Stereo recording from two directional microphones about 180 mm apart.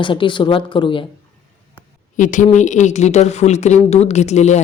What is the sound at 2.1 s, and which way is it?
Speech, 45° left (ahead or behind).